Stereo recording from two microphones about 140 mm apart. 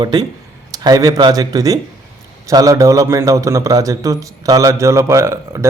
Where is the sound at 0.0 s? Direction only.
30° right (ahead or behind).